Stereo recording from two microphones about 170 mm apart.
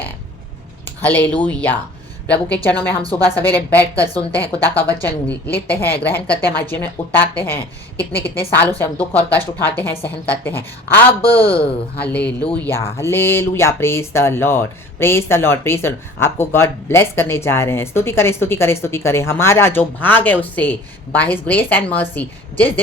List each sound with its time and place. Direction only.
1.0 s speech: 10° left (ahead or behind)
3.0 s a woman's voice: 30° left (ahead or behind)
4.3 s speech: 10° left (ahead or behind)
11.3 s a woman's voice: 35° left (ahead or behind)
11.9 s speech: 10° left (ahead or behind)